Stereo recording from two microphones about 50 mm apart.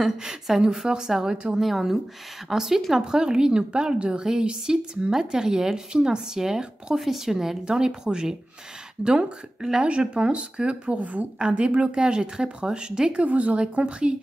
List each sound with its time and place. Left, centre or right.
0.0 s a woman's voice: centre
1.6 s a woman's voice: centre; by 11.2 s right
11.3 s speech: centre
13.2 s speech: right